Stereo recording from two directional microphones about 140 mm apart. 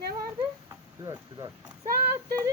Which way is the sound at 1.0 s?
30° right (ahead or behind).